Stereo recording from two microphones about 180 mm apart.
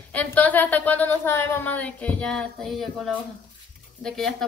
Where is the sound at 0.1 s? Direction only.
10° left (ahead or behind).